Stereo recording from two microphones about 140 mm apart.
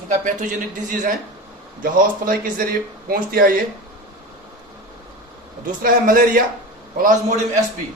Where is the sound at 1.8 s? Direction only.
85° right.